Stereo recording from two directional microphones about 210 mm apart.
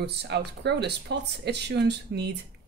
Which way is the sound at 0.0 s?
55° right (ahead or behind).